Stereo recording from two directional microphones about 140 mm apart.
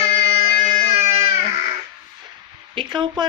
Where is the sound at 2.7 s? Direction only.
35° right (ahead or behind).